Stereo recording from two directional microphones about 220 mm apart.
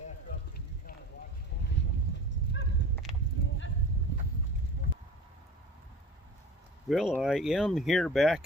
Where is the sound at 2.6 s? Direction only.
55° left (ahead or behind).